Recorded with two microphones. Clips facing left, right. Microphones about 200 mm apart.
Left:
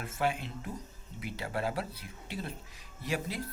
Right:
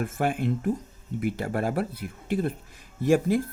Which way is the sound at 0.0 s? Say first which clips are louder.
Right 7 dB; 50° right (ahead or behind).